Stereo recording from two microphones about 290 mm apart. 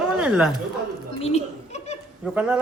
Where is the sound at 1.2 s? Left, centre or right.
Left.